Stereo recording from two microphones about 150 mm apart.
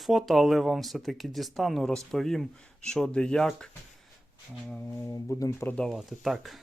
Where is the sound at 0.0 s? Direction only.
Centre (ahead or behind).